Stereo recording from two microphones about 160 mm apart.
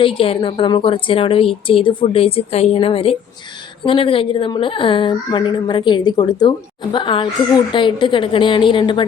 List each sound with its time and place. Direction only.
0.0 s a woman's voice: 35° left (ahead or behind)